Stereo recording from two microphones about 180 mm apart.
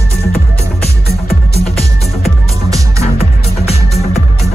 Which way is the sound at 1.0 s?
35° left (ahead or behind).